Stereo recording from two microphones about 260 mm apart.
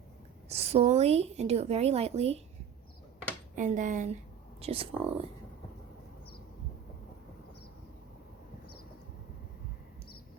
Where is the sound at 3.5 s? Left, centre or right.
Right.